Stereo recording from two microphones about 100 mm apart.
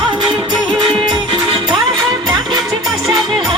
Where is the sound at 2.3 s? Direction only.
40° right (ahead or behind).